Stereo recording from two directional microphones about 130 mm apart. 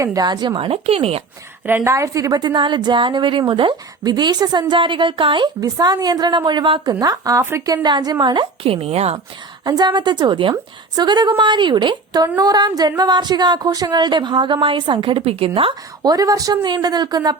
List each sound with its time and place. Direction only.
0.0 s a woman's voice: 25° right (ahead or behind); by 1.2 s 50° right (ahead or behind)
1.6 s a woman's voice: 20° right (ahead or behind); by 9.1 s 50° right (ahead or behind)
9.6 s a woman's voice: 30° right (ahead or behind)
16.0 s a woman's voice: 30° right (ahead or behind)